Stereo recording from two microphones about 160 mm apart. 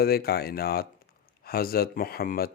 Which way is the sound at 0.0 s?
75° left (ahead or behind).